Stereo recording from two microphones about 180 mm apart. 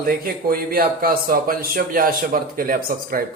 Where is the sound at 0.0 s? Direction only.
55° right (ahead or behind).